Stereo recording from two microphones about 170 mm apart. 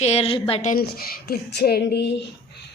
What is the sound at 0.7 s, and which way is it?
Speech, 65° left (ahead or behind).